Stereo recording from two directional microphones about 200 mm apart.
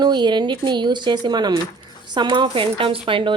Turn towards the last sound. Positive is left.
turn(degrees=-25)  # may be behind; listen again after turning